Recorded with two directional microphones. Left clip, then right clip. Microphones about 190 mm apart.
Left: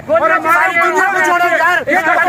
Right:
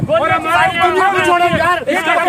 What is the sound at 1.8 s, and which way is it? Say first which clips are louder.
Speech: left 3 dB; 50° right (ahead or behind).